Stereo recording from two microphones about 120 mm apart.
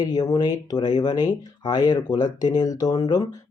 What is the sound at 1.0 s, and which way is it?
Speech, 35° left (ahead or behind).